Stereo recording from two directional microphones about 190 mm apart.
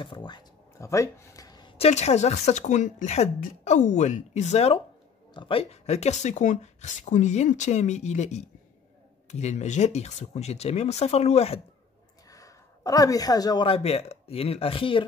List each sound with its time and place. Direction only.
0.0 s a sound: 25° left (ahead or behind)
1.9 s speech: 35° left (ahead or behind)
12.3 s speech: 15° left (ahead or behind)